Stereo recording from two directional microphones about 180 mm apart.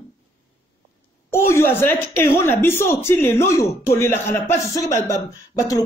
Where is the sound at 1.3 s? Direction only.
15° left (ahead or behind).